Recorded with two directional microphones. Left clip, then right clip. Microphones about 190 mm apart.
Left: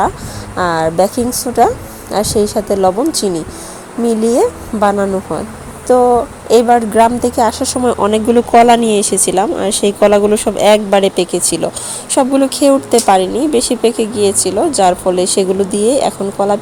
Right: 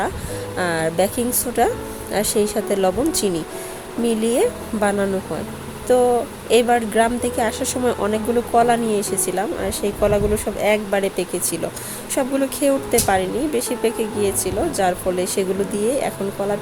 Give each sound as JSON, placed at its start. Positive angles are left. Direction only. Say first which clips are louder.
{"t": 0.5, "sound": "a woman's voice", "louder": "left 8 dB", "side_deg": 15}